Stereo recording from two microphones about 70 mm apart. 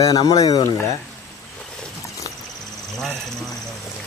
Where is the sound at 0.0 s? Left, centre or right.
Left.